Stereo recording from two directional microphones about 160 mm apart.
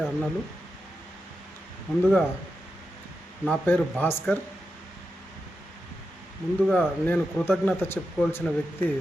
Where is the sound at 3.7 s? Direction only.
10° left (ahead or behind).